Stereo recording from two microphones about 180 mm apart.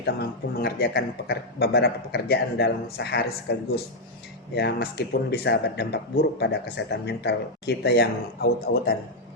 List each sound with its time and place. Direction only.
0.0 s speech: 65° left (ahead or behind)